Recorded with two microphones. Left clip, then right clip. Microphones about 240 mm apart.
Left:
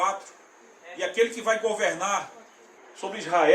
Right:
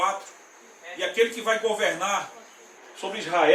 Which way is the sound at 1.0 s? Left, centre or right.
Centre.